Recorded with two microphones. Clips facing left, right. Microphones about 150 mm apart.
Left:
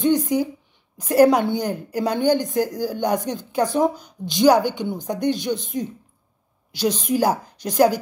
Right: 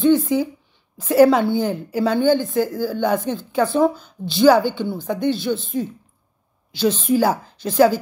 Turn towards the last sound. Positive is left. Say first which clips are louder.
# right 2 dB
turn(degrees=15)  # may be behind; listen again after turning